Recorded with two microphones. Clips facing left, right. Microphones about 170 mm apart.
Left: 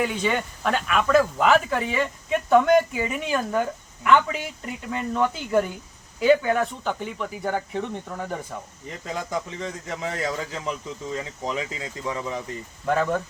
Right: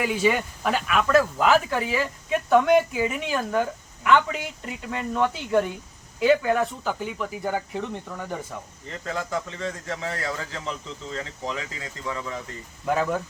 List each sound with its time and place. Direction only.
0.0 s speech: 5° right (ahead or behind)
8.9 s speech: 15° left (ahead or behind)
12.8 s speech: 5° right (ahead or behind)